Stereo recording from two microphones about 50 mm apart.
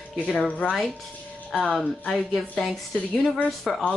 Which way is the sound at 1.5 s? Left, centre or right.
Centre.